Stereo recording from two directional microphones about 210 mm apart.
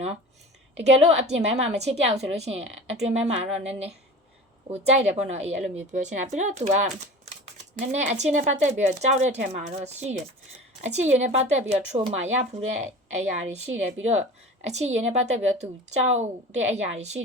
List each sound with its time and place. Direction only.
0.8 s speech: 30° right (ahead or behind)
4.7 s a woman's voice: 30° right (ahead or behind)